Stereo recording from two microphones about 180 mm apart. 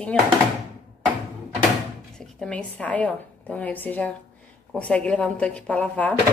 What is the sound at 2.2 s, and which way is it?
A woman's voice, 5° left (ahead or behind).